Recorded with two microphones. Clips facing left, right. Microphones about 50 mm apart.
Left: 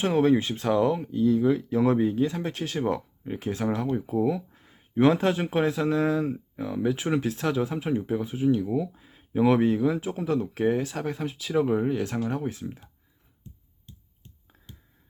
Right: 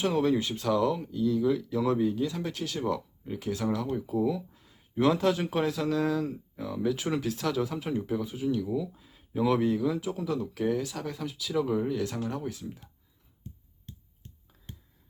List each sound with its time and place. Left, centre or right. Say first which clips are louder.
0.0 s speech: left 4 dB; left